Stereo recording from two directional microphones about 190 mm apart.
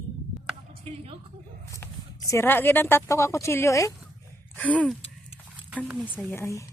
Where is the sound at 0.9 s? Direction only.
35° right (ahead or behind).